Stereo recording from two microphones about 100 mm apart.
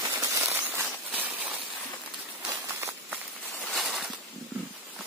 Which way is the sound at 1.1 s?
15° right (ahead or behind).